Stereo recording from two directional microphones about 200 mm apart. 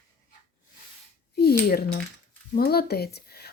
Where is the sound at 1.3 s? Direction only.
50° left (ahead or behind).